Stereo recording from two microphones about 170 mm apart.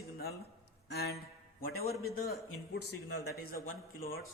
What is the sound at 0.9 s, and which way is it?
Speech, 75° left (ahead or behind).